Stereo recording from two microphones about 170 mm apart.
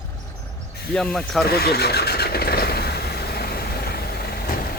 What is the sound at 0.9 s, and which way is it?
Speech, 5° left (ahead or behind).